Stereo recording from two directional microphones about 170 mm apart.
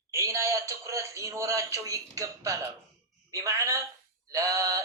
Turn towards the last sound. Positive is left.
turn(degrees=-20)  # may be behind; listen again after turning